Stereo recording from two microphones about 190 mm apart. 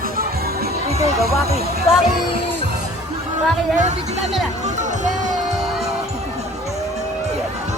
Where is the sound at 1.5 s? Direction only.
55° right (ahead or behind).